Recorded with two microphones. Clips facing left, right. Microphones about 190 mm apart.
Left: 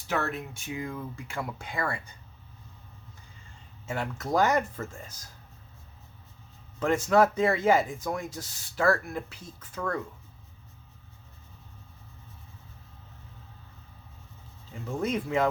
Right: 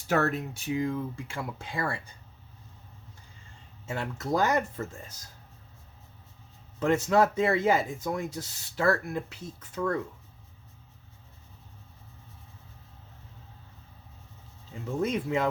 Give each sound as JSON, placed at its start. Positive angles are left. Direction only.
{"t": 0.1, "sound": "speech", "side_deg": -40}
{"t": 3.9, "sound": "speech", "side_deg": -25}
{"t": 6.7, "sound": "speech", "side_deg": -25}
{"t": 15.0, "sound": "speech", "side_deg": -20}